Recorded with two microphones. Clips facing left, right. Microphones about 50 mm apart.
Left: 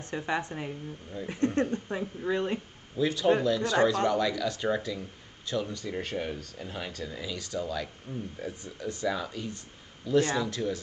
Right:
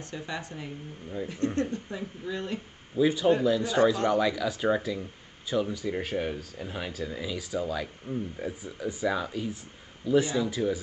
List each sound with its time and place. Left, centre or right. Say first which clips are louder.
0.1 s speech: left 6 dB; left
3.0 s speech: right 2 dB; centre